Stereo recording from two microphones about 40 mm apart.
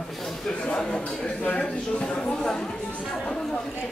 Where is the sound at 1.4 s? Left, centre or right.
Left.